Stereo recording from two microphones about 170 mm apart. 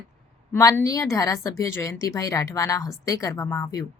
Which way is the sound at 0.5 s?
15° left (ahead or behind).